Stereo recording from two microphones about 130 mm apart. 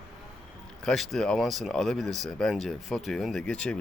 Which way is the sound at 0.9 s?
5° left (ahead or behind).